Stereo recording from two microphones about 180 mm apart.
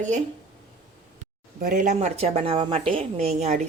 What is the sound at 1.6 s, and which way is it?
Speech, 45° right (ahead or behind).